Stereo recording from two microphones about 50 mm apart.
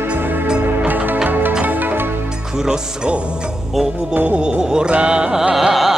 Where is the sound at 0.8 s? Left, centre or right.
Right.